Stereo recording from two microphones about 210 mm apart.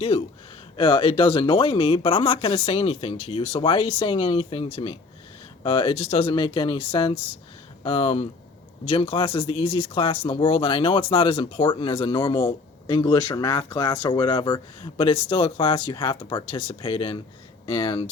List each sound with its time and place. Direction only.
0.1 s speech: 30° left (ahead or behind)